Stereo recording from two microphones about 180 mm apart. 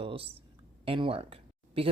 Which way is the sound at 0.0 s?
30° right (ahead or behind).